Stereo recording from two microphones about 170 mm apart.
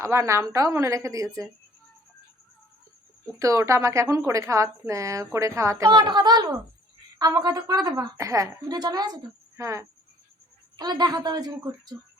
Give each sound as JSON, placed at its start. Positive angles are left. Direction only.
{"t": 0.0, "sound": "a woman's voice", "side_deg": -15}
{"t": 3.3, "sound": "a woman's voice", "side_deg": -20}